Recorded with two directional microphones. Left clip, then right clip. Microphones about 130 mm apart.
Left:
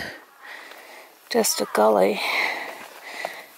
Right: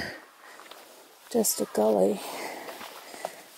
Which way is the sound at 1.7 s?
15° right (ahead or behind).